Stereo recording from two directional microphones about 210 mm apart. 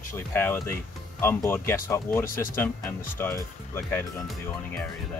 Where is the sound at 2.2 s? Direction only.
40° left (ahead or behind).